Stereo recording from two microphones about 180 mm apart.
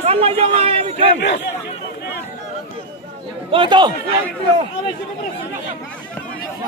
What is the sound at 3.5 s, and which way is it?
Speech, 25° right (ahead or behind).